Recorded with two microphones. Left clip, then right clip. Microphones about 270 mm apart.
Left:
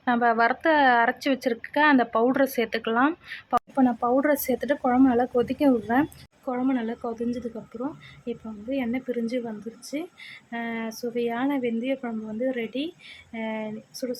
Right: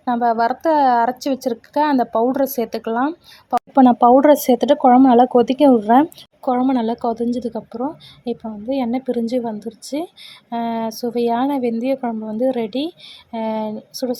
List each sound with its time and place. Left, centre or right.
0.2 s a woman's voice: centre
10.5 s a woman's voice: centre